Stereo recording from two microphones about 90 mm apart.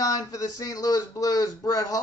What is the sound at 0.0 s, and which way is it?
Speech, 45° left (ahead or behind).